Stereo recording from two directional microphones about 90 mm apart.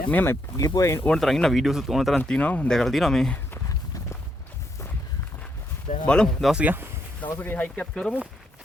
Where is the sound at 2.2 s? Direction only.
15° left (ahead or behind).